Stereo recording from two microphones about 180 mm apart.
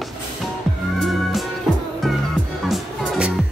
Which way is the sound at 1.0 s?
Centre (ahead or behind).